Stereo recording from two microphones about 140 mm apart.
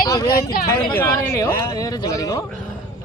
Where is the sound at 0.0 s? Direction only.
25° left (ahead or behind).